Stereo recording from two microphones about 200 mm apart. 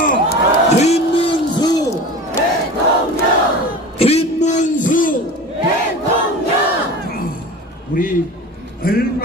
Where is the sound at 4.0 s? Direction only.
30° left (ahead or behind).